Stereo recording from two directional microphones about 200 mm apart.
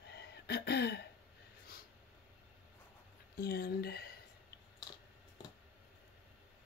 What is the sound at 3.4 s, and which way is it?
Speech, 50° left (ahead or behind).